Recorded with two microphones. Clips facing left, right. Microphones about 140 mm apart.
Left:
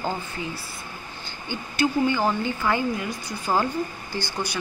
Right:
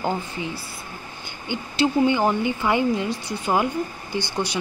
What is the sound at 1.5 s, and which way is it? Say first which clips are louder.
Speech: right 2 dB; 20° right (ahead or behind).